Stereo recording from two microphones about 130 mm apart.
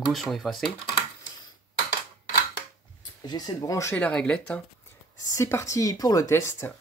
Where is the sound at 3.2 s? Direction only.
30° left (ahead or behind).